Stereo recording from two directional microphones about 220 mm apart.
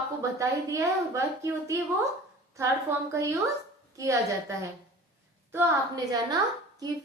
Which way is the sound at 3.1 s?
15° right (ahead or behind).